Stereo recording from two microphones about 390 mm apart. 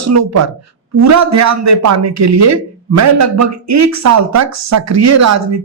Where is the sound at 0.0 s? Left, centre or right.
Right.